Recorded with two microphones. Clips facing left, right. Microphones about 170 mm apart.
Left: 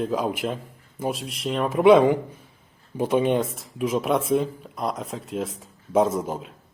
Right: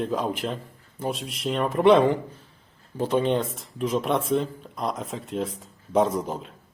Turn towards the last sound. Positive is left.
turn(degrees=5)  # may be behind; listen again after turning